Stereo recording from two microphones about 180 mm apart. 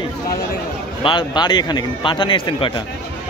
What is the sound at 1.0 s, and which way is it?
Speech, 25° left (ahead or behind).